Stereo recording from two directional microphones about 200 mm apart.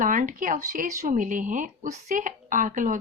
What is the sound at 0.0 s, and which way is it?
Speech, 40° right (ahead or behind).